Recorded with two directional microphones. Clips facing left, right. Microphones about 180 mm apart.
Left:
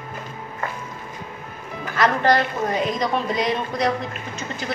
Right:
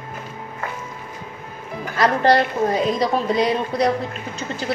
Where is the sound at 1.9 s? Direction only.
35° right (ahead or behind).